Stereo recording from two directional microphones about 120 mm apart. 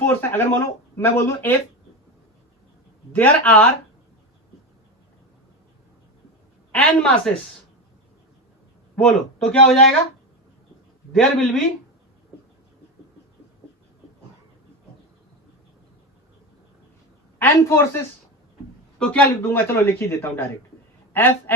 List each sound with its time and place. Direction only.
0.0 s speech: 15° left (ahead or behind)
3.1 s speech: 15° left (ahead or behind)
6.7 s speech: 10° left (ahead or behind)
9.5 s speech: 10° left (ahead or behind)
11.1 s a man's voice: 5° left (ahead or behind)
17.4 s speech: 20° left (ahead or behind)
18.9 s speech: 10° left (ahead or behind)